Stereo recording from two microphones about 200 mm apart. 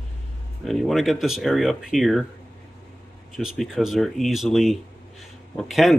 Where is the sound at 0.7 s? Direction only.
Centre (ahead or behind).